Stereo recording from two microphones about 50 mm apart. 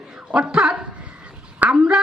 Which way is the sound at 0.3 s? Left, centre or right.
Right.